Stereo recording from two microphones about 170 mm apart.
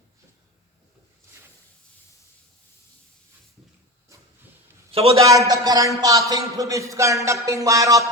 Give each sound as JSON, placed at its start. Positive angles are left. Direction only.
{"t": 4.9, "sound": "a man's voice", "side_deg": -35}
{"t": 5.5, "sound": "speech", "side_deg": -20}